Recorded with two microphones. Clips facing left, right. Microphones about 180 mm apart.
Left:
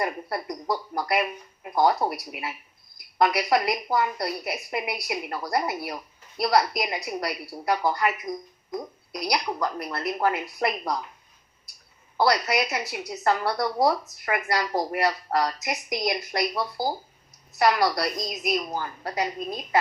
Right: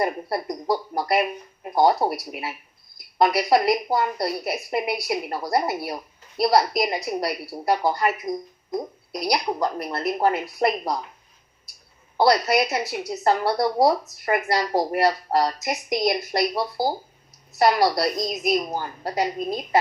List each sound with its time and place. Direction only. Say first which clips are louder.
0.0 s a woman's voice: right 4 dB; 30° right (ahead or behind)
12.1 s a woman's voice: right 4 dB; 30° right (ahead or behind)